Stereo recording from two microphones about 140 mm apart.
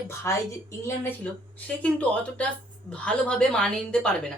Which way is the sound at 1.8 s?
10° left (ahead or behind).